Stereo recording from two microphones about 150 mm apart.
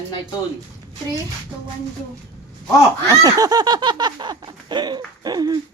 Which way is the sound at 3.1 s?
25° right (ahead or behind).